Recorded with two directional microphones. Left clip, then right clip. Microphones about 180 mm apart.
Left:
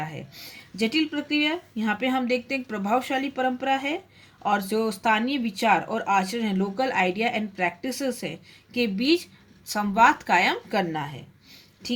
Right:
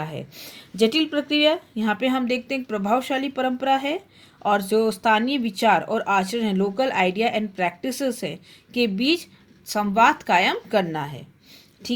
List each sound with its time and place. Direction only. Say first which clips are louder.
0.0 s speech: right 2 dB; 35° right (ahead or behind)